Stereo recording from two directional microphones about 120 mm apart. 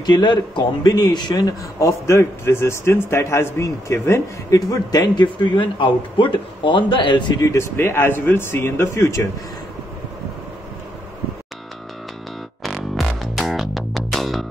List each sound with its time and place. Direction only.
0.0 s speech: 40° left (ahead or behind)
7.4 s speech: 20° left (ahead or behind)
12.6 s music: centre (ahead or behind)